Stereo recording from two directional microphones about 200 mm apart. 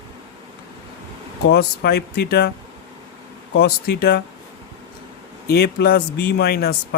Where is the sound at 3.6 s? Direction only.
50° left (ahead or behind).